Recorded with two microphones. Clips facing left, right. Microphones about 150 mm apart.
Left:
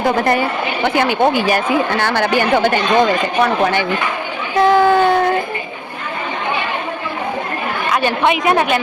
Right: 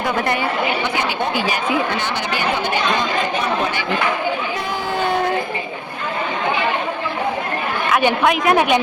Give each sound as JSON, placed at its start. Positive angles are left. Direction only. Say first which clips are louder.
{"t": 0.8, "sound": "speech", "louder": "left 7 dB", "side_deg": 55}
{"t": 4.6, "sound": "speech", "louder": "left 14 dB", "side_deg": 70}
{"t": 8.2, "sound": "a woman's voice", "louder": "left 4 dB", "side_deg": 0}